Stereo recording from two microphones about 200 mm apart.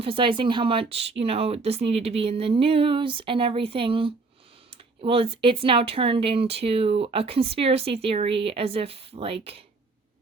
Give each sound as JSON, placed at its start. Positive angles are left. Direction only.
{"t": 0.0, "sound": "speech", "side_deg": -25}